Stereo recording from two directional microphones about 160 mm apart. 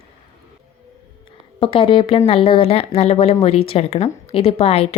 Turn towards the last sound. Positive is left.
turn(degrees=40)  # may be behind; listen again after turning